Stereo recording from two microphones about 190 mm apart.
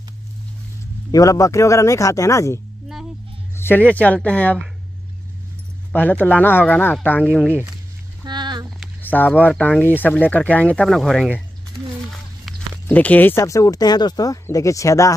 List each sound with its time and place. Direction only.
1.1 s speech: 15° left (ahead or behind)
5.9 s speech: 10° left (ahead or behind)
7.4 s speech: 10° right (ahead or behind)
8.3 s a sound: 25° right (ahead or behind)
8.6 s speech: 5° left (ahead or behind)
12.1 s a sound: centre (ahead or behind)
12.8 s speech: 10° left (ahead or behind)